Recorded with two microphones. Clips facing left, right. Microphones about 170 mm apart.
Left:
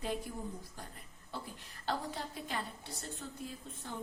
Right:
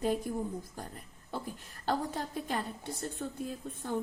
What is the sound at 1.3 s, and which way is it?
A woman's voice, 50° right (ahead or behind).